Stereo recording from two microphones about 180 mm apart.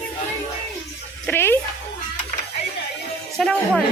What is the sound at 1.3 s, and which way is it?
Speech, 15° left (ahead or behind).